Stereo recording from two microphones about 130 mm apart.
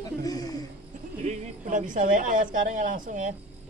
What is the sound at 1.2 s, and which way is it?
A woman's voice, 65° right (ahead or behind).